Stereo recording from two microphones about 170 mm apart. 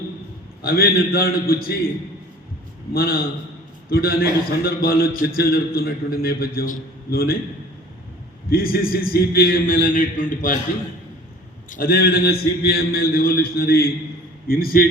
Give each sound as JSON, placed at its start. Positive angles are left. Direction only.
{"t": 0.6, "sound": "a man's voice", "side_deg": 65}
{"t": 2.9, "sound": "a man's voice", "side_deg": 60}
{"t": 8.4, "sound": "a man's voice", "side_deg": 60}
{"t": 11.7, "sound": "a man's voice", "side_deg": 55}